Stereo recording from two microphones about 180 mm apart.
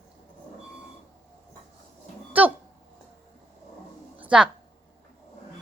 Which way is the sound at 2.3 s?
10° right (ahead or behind).